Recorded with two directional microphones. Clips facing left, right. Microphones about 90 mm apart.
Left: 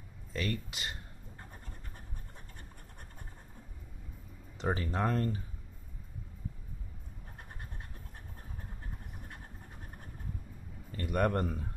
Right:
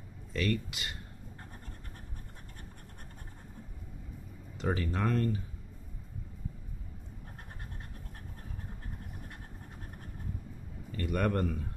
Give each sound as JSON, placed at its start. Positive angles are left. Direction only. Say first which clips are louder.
{"t": 0.3, "sound": "speech", "louder": "right 4 dB", "side_deg": 20}
{"t": 4.6, "sound": "speech", "louder": "even", "side_deg": 25}
{"t": 11.1, "sound": "speech", "louder": "even", "side_deg": 20}